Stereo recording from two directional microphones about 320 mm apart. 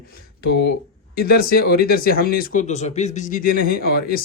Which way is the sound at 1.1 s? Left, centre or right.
Left.